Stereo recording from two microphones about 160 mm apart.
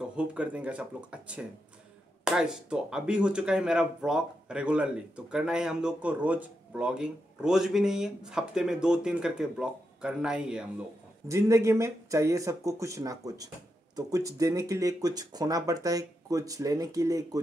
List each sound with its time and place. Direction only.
0.0 s speech: 5° right (ahead or behind)
11.2 s speech: 20° right (ahead or behind)